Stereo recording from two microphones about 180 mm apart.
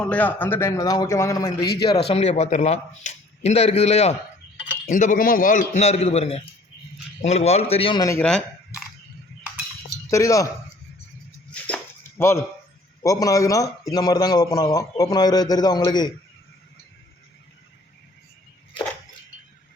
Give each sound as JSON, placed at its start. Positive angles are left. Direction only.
{"t": 0.0, "sound": "speech", "side_deg": 10}
{"t": 1.8, "sound": "a man's voice", "side_deg": 35}
{"t": 8.0, "sound": "speech", "side_deg": 15}
{"t": 10.1, "sound": "speech", "side_deg": 15}
{"t": 11.5, "sound": "dog", "side_deg": 10}
{"t": 13.0, "sound": "a man's voice", "side_deg": 20}